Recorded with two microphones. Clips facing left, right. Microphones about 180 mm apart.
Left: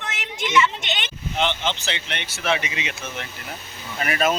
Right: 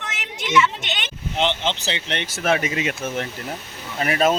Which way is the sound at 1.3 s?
30° right (ahead or behind).